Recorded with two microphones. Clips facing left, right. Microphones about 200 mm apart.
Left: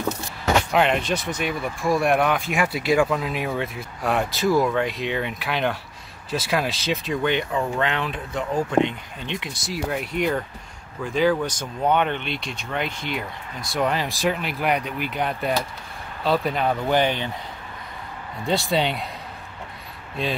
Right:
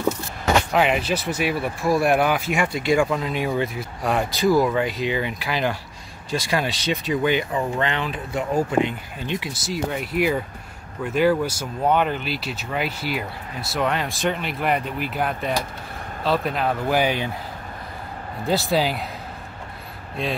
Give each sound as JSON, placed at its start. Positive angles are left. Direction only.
{"t": 0.7, "sound": "speech", "side_deg": -5}
{"t": 18.5, "sound": "speech", "side_deg": -5}